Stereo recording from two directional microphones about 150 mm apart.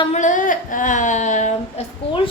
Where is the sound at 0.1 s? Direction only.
55° left (ahead or behind).